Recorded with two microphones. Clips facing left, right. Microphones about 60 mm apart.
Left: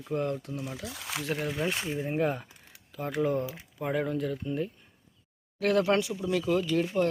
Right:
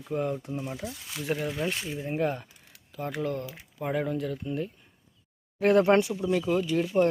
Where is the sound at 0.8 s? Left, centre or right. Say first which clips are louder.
Even; left.